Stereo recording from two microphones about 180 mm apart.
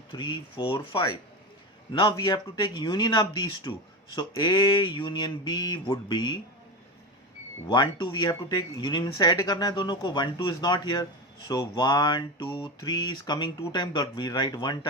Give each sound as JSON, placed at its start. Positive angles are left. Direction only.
{"t": 0.1, "sound": "speech", "side_deg": 25}
{"t": 7.7, "sound": "speech", "side_deg": 25}